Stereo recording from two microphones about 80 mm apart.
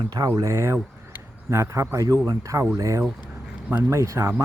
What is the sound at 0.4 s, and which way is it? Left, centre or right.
Speech, right.